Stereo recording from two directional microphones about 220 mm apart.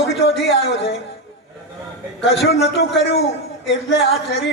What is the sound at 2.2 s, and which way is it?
A man's voice, 55° left (ahead or behind).